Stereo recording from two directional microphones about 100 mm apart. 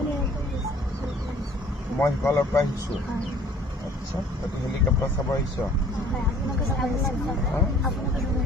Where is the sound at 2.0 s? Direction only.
30° left (ahead or behind).